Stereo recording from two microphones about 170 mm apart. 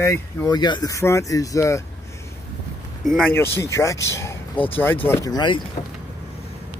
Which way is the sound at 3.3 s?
15° left (ahead or behind).